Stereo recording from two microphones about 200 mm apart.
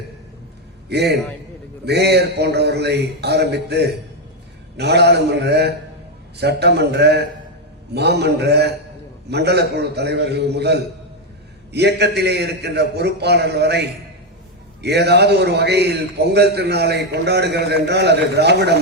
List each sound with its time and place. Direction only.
0.9 s a man's voice: 55° right (ahead or behind)